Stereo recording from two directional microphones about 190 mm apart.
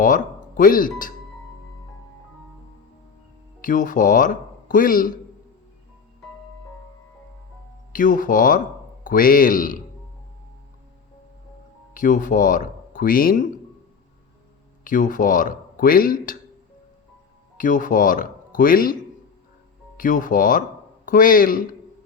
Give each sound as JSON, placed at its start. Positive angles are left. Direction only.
{"t": 0.0, "sound": "speech", "side_deg": 45}
{"t": 3.6, "sound": "speech", "side_deg": 45}
{"t": 7.9, "sound": "speech", "side_deg": 45}
{"t": 11.9, "sound": "speech", "side_deg": 45}
{"t": 14.8, "sound": "speech", "side_deg": 45}
{"t": 17.6, "sound": "speech", "side_deg": 45}
{"t": 20.0, "sound": "speech", "side_deg": 45}